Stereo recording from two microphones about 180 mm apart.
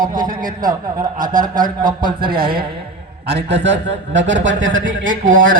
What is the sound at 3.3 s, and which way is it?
A man's voice, 75° right (ahead or behind).